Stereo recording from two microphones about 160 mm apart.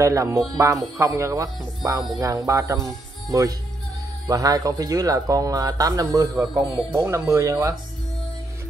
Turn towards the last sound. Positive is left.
turn(degrees=-20)  # may be behind; listen again after turning